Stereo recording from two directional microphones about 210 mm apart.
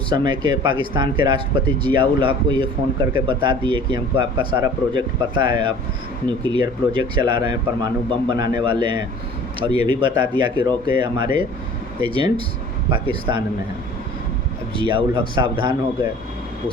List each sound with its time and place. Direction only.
0.1 s speech: 20° right (ahead or behind)
14.8 s speech: 25° right (ahead or behind)